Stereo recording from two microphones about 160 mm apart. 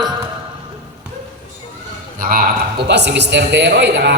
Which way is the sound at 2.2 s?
65° right (ahead or behind).